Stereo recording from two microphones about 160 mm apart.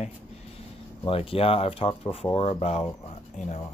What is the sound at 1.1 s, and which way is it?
Speech, 35° left (ahead or behind).